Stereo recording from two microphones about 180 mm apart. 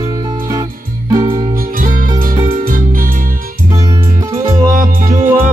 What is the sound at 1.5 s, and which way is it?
Music, 50° right (ahead or behind).